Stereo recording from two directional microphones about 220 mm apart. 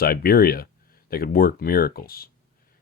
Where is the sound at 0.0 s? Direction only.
45° left (ahead or behind).